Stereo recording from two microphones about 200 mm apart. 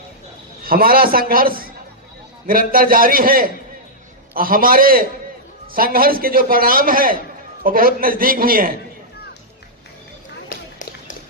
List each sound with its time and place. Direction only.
0.6 s a man's voice: 45° right (ahead or behind)
10.5 s run: 40° left (ahead or behind)